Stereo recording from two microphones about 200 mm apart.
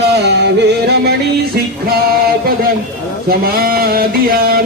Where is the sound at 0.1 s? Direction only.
55° right (ahead or behind).